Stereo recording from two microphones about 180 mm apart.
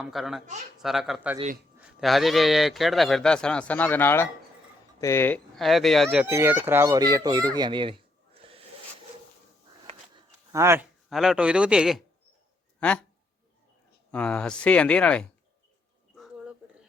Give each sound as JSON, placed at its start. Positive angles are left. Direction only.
{"t": 0.0, "sound": "a man's voice", "side_deg": 0}
{"t": 5.5, "sound": "a man's voice", "side_deg": 0}
{"t": 6.2, "sound": "a child's voice", "side_deg": -15}
{"t": 10.5, "sound": "speech", "side_deg": -15}
{"t": 11.1, "sound": "a man's voice", "side_deg": 0}
{"t": 12.8, "sound": "speech", "side_deg": 5}
{"t": 14.1, "sound": "speech", "side_deg": 5}
{"t": 16.1, "sound": "a sound", "side_deg": 0}